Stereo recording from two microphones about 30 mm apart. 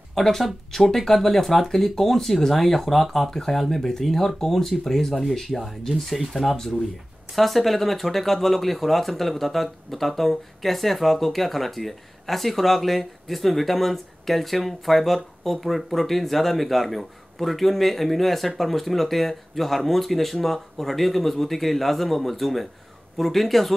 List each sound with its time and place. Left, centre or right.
0.2 s speech: centre
6.5 s speech: centre